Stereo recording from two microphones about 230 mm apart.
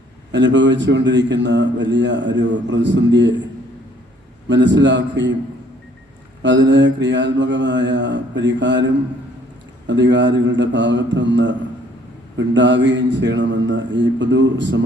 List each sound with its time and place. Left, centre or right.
0.3 s a man's voice: right
4.4 s a man's voice: right
6.4 s a man's voice: right